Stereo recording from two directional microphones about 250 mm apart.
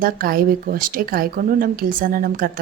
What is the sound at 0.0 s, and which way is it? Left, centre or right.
A woman's voice, right.